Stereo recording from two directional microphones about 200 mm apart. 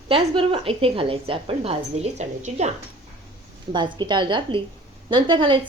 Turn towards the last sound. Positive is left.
turn(degrees=-25)  # may be behind; listen again after turning